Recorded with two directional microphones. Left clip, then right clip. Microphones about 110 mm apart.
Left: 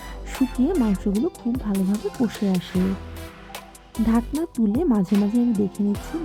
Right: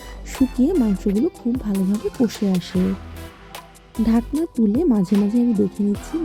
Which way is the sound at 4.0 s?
Centre (ahead or behind).